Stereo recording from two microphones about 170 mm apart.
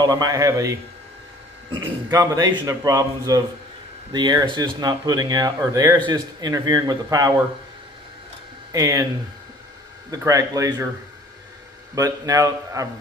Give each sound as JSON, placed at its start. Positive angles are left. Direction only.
{"t": 0.0, "sound": "speech", "side_deg": -20}
{"t": 8.7, "sound": "speech", "side_deg": -20}
{"t": 10.1, "sound": "speech", "side_deg": -20}
{"t": 11.9, "sound": "speech", "side_deg": -20}